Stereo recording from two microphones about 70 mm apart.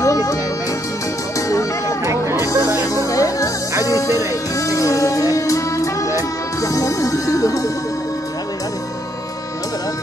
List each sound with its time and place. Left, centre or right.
0.0 s music: left
1.5 s music: left